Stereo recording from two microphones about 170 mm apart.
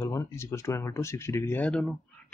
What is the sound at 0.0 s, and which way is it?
Speech, 15° left (ahead or behind).